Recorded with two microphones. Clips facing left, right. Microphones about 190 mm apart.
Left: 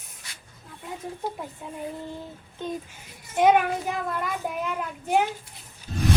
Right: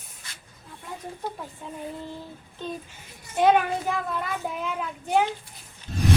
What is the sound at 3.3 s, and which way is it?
Speech, 15° left (ahead or behind).